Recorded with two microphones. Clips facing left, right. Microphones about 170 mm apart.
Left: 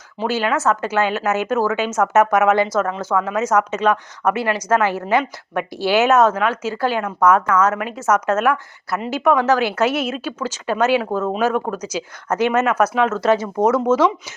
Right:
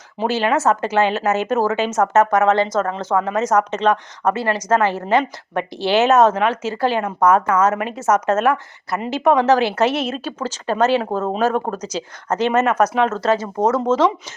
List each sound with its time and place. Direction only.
0.2 s a woman's voice: centre (ahead or behind)
11.1 s speech: 30° right (ahead or behind)
11.8 s a woman's voice: 5° left (ahead or behind)